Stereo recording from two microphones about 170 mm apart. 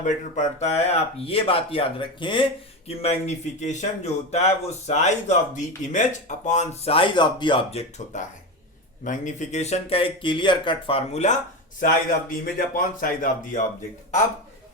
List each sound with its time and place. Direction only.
0.0 s speech: 45° left (ahead or behind)
12.3 s speech: 55° left (ahead or behind)